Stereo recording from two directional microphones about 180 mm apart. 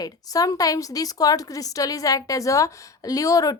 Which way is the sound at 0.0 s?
20° left (ahead or behind).